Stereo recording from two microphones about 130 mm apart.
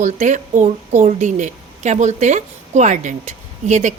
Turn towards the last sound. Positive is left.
turn(degrees=-65)  # may be behind; listen again after turning